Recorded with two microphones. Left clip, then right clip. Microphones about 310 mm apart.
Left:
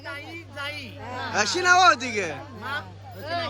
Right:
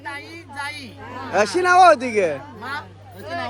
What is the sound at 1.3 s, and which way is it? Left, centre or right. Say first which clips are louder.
Speech: right 4 dB; centre.